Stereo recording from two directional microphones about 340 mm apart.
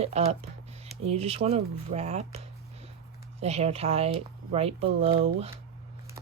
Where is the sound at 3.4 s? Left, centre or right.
Centre.